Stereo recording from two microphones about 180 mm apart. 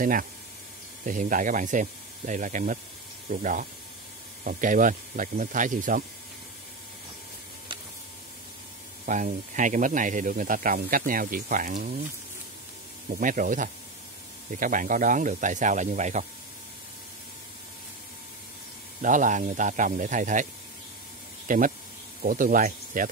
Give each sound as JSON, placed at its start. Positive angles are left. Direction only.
{"t": 0.0, "sound": "speech", "side_deg": -50}
{"t": 9.0, "sound": "speech", "side_deg": -45}
{"t": 13.1, "sound": "speech", "side_deg": -50}
{"t": 18.9, "sound": "speech", "side_deg": -45}
{"t": 21.5, "sound": "speech", "side_deg": -45}